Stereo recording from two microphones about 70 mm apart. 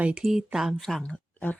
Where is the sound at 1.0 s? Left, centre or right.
Left.